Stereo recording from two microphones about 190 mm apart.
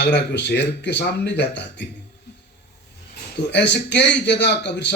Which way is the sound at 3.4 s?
65° left (ahead or behind).